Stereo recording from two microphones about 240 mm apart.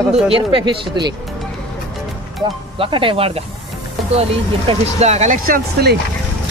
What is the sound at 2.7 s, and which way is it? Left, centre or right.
Speech, right.